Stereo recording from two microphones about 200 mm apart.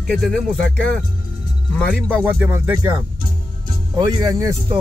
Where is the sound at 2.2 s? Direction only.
10° right (ahead or behind).